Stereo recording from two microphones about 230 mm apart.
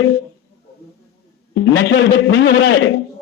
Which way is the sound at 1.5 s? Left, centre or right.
Left.